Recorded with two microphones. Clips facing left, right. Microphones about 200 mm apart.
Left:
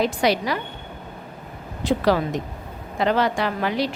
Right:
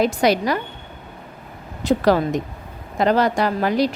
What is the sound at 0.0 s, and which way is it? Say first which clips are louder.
Speech: right 3 dB; 45° right (ahead or behind).